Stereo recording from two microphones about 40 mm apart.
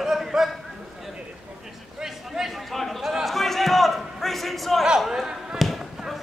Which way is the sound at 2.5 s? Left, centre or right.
Centre.